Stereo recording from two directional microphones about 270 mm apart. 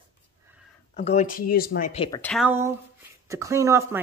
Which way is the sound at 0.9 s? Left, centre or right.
Left.